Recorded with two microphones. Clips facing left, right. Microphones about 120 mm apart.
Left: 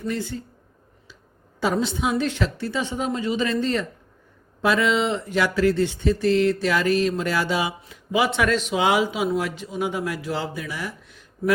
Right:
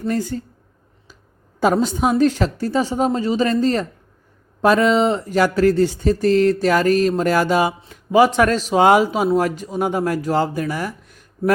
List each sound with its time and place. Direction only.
0.0 s speech: 45° right (ahead or behind)
1.6 s a woman's voice: 45° right (ahead or behind)